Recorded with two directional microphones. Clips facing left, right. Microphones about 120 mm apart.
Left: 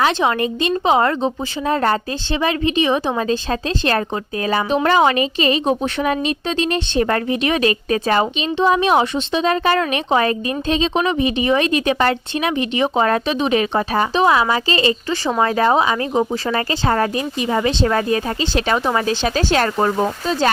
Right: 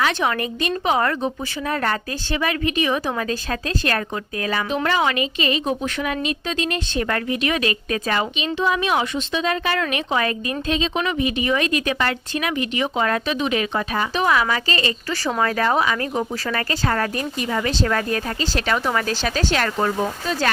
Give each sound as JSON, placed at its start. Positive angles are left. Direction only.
{"t": 0.0, "sound": "a woman's voice", "side_deg": 25}